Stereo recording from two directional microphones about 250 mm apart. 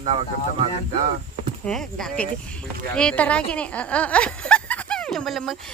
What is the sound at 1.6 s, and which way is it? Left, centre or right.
Speech, centre.